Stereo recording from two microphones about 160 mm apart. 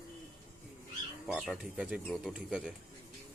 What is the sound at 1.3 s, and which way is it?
Speech, 5° right (ahead or behind).